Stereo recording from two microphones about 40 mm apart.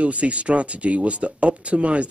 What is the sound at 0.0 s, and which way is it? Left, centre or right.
Speech, right.